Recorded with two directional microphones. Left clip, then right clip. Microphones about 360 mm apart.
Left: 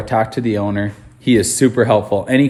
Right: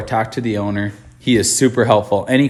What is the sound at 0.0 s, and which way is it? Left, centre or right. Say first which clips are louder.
Speech: left 2 dB; centre.